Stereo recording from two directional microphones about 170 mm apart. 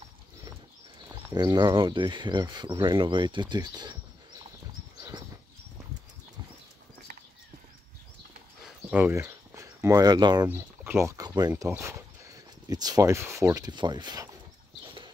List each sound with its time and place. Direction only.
1.3 s speech: 25° right (ahead or behind)
8.9 s speech: 10° right (ahead or behind)